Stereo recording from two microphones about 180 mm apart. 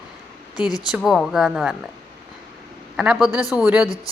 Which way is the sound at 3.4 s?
20° left (ahead or behind).